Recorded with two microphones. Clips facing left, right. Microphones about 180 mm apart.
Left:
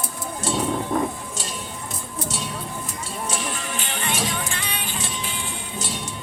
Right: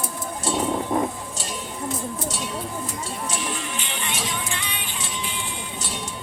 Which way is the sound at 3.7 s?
45° left (ahead or behind).